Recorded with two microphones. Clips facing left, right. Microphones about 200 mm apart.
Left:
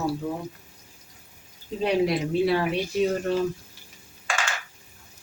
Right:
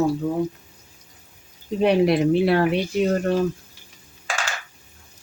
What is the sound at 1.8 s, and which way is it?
Speech, 65° right (ahead or behind).